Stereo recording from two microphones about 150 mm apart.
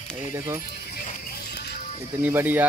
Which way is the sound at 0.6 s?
90° left.